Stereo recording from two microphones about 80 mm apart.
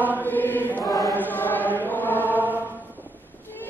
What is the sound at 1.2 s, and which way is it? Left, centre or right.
Chant, left.